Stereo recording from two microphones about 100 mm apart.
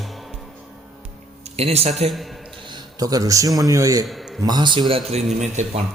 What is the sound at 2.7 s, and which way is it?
A man's voice, 40° right (ahead or behind).